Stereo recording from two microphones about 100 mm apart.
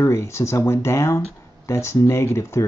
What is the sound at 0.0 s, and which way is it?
Speech, 30° left (ahead or behind).